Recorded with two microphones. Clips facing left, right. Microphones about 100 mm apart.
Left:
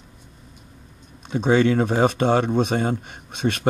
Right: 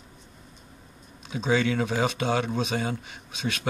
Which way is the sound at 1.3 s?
50° left (ahead or behind).